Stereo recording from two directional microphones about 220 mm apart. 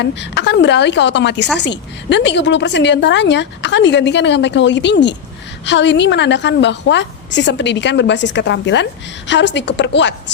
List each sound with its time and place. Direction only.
0.0 s a woman's voice: 50° left (ahead or behind)